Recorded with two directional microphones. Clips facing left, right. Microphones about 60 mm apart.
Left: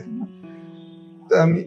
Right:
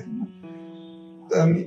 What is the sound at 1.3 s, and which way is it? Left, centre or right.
Speech, left.